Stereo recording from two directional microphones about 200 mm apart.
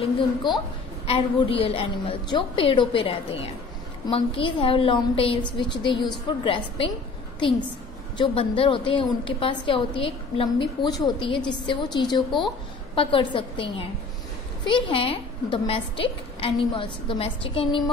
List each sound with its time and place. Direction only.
0.0 s a woman's voice: 25° left (ahead or behind)
8.2 s a woman's voice: 25° left (ahead or behind)